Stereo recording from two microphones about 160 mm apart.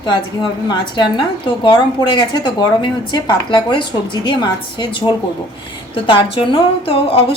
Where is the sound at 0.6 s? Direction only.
30° left (ahead or behind).